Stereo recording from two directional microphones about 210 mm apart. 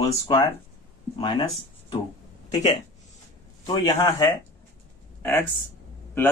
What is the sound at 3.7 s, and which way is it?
Speech, 15° left (ahead or behind).